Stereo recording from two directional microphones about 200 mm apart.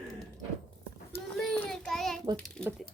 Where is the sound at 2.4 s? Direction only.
5° left (ahead or behind).